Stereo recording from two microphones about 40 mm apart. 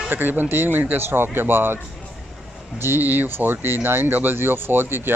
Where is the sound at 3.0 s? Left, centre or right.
Right.